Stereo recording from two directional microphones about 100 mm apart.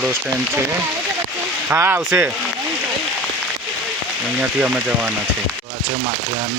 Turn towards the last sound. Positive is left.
turn(degrees=-15)  # may be behind; listen again after turning